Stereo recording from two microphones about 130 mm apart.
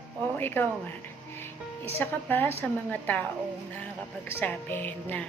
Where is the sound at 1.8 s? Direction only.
15° left (ahead or behind).